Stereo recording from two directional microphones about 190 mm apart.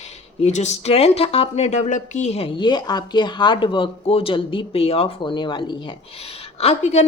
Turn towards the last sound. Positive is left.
turn(degrees=35)  # may be behind; listen again after turning